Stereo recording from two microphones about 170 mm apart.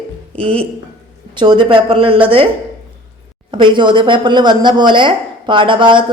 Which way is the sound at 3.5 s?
30° right (ahead or behind).